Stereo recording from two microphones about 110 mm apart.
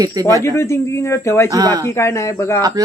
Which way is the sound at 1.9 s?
25° left (ahead or behind).